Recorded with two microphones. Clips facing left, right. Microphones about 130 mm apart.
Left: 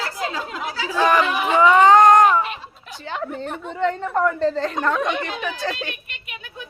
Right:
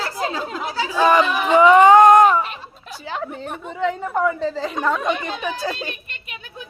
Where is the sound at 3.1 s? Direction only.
5° right (ahead or behind).